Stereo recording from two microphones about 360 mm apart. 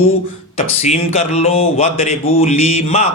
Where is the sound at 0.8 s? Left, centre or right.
Centre.